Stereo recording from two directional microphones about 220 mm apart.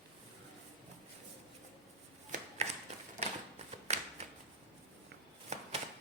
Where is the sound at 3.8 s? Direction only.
30° right (ahead or behind).